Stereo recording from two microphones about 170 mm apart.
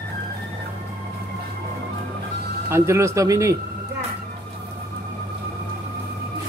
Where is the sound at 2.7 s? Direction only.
15° right (ahead or behind).